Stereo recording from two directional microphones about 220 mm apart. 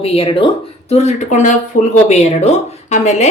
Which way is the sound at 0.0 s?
25° left (ahead or behind).